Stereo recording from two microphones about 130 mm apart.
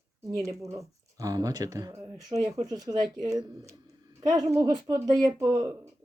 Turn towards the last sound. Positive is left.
turn(degrees=-25)  # may be behind; listen again after turning